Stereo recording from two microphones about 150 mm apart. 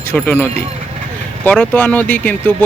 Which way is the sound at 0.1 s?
15° left (ahead or behind).